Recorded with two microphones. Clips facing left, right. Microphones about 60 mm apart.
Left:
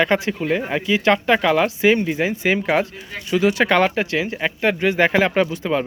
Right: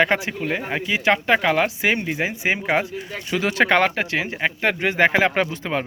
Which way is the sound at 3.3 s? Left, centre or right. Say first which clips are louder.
Left 2 dB; right.